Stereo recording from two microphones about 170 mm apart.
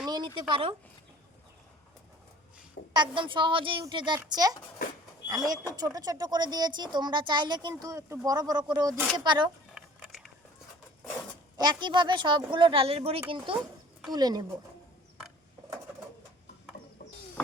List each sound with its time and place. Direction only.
0.0 s speech: 25° right (ahead or behind)
2.9 s speech: 30° right (ahead or behind)
9.7 s a sound: centre (ahead or behind)
11.5 s speech: 25° right (ahead or behind)